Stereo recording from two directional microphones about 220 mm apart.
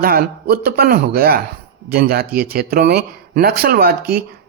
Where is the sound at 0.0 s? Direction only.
40° right (ahead or behind).